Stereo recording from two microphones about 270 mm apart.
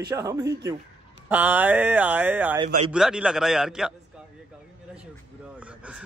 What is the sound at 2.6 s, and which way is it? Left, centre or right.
Speech, centre.